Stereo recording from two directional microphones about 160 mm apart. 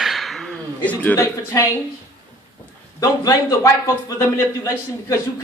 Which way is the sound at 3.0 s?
25° left (ahead or behind).